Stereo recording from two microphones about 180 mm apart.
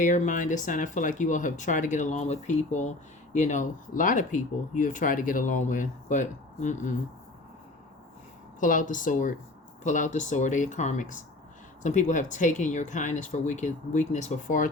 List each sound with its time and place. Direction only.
0.0 s speech: 45° left (ahead or behind)
8.6 s speech: 45° left (ahead or behind)